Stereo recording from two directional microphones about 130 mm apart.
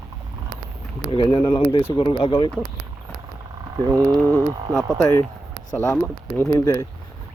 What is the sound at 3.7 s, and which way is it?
Speech, 30° right (ahead or behind).